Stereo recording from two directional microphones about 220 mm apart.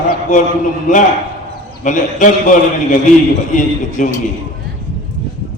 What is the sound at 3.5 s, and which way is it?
Speech, 35° left (ahead or behind).